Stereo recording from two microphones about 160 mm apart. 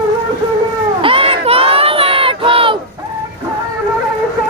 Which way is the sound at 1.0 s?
35° right (ahead or behind).